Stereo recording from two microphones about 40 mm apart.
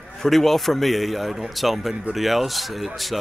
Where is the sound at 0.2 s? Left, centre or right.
Centre.